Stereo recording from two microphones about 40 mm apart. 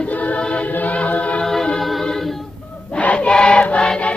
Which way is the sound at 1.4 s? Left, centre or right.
Centre.